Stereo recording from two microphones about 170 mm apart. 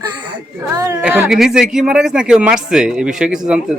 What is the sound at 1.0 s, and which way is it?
Speech, 5° right (ahead or behind).